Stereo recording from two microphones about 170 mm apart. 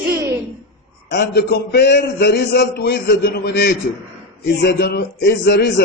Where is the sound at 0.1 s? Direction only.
15° right (ahead or behind).